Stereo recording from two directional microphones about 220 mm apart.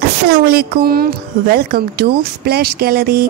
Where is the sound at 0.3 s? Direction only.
45° right (ahead or behind).